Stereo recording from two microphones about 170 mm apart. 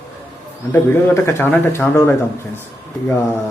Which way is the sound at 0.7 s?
15° left (ahead or behind).